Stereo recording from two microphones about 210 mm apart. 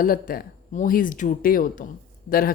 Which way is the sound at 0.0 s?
45° left (ahead or behind).